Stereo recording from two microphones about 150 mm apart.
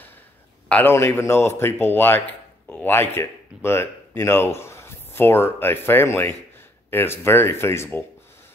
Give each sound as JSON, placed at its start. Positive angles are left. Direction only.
{"t": 0.7, "sound": "speech", "side_deg": 10}